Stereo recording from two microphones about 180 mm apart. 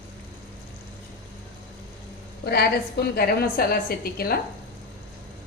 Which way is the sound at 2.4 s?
60° left (ahead or behind).